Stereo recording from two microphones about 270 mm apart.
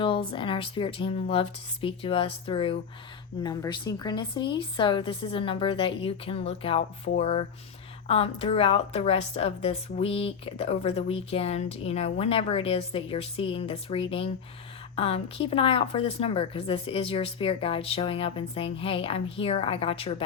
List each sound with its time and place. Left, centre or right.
0.3 s speech: centre